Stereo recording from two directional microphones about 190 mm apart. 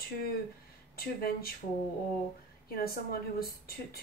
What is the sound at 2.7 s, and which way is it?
Speech, 50° left (ahead or behind).